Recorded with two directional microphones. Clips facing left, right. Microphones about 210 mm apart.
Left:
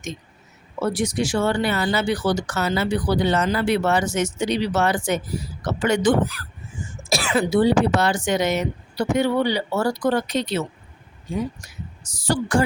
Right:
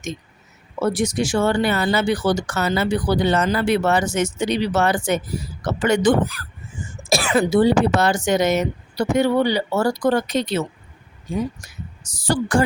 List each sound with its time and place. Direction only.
0.8 s speech: 45° right (ahead or behind)
12.0 s speech: 55° right (ahead or behind)